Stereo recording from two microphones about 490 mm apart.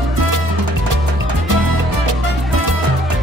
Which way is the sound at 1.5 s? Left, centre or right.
Right.